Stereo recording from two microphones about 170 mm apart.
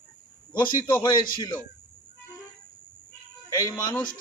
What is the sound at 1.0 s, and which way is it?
Speech, 25° left (ahead or behind).